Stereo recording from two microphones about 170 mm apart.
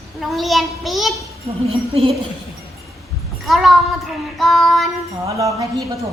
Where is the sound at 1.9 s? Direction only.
35° right (ahead or behind).